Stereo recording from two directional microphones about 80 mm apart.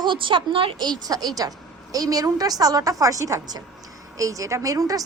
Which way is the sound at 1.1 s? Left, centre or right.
Right.